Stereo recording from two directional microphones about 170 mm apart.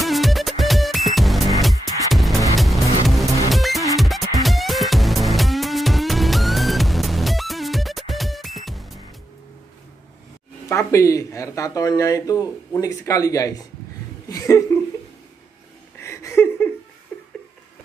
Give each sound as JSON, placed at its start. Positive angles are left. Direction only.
{"t": 0.0, "sound": "music", "side_deg": 0}
{"t": 10.7, "sound": "speech", "side_deg": 15}
{"t": 16.0, "sound": "a sound", "side_deg": 15}
{"t": 17.1, "sound": "laughter", "side_deg": 10}